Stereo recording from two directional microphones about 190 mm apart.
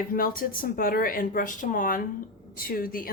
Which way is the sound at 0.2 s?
50° left (ahead or behind).